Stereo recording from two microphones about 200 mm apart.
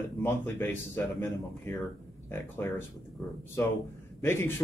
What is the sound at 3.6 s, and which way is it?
Speech, 10° left (ahead or behind).